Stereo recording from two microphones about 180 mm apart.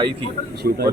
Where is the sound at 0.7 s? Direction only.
60° right (ahead or behind).